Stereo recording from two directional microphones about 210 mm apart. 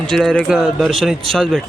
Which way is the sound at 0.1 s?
Centre (ahead or behind).